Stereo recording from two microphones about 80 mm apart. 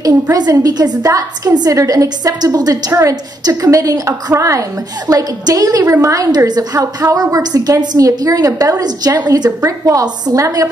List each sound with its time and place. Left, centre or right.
0.0 s a woman's voice: right
2.9 s a woman's voice: right
3.4 s a woman's voice: right
9.7 s a woman's voice: right